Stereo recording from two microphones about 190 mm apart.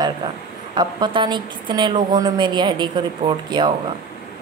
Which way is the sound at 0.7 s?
25° right (ahead or behind).